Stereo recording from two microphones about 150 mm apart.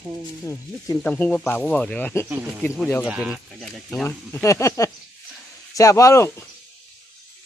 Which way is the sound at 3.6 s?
5° left (ahead or behind).